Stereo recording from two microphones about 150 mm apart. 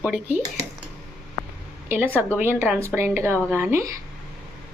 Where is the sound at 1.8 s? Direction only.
15° right (ahead or behind).